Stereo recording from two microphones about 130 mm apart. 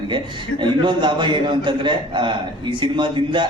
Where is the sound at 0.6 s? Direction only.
40° right (ahead or behind).